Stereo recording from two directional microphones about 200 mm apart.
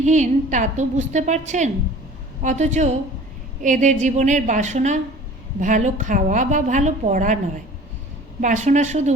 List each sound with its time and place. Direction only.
0.0 s a woman's voice: 35° right (ahead or behind)
8.4 s a woman's voice: 40° right (ahead or behind)